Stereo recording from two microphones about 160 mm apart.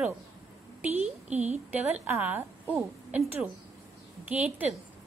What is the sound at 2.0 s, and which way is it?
A woman's voice, 15° right (ahead or behind).